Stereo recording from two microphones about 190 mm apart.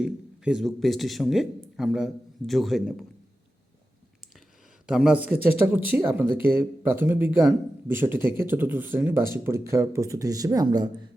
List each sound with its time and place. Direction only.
0.0 s speech: 5° right (ahead or behind)
4.9 s speech: 5° right (ahead or behind); by 11.1 s 20° right (ahead or behind)